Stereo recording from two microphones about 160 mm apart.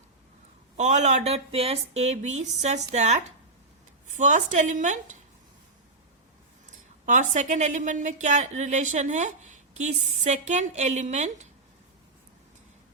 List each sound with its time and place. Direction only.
0.8 s a woman's voice: 50° right (ahead or behind)
7.0 s a woman's voice: 50° right (ahead or behind)